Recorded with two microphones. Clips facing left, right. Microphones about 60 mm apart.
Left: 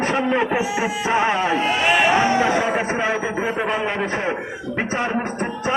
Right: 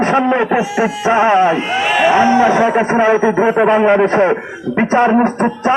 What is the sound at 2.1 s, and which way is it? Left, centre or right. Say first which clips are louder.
A man's voice: right 7 dB; right.